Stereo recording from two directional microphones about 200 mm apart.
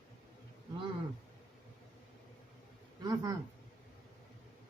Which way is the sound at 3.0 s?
20° right (ahead or behind).